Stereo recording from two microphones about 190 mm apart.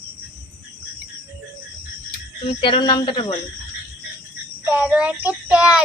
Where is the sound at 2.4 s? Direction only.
25° left (ahead or behind).